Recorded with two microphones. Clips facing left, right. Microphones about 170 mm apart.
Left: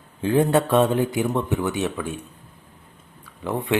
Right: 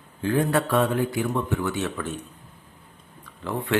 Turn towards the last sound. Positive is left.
turn(degrees=20)  # may be behind; listen again after turning